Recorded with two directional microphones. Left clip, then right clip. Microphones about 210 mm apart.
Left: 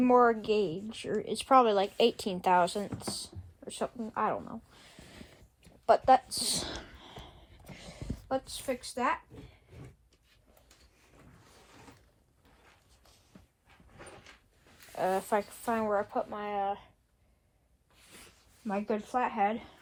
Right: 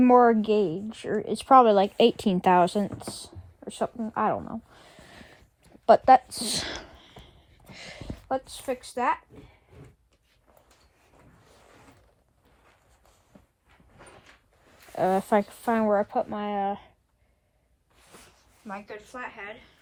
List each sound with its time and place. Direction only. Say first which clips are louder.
0.0 s a woman's voice: right 6 dB; 55° right (ahead or behind)
14.9 s speech: right 6 dB; 55° right (ahead or behind)
17.9 s a sound: right 2 dB; 20° right (ahead or behind)
18.7 s speech: left 7 dB; 10° left (ahead or behind)